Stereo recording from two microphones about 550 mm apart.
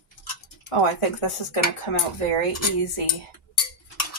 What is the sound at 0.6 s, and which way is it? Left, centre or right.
Speech, left.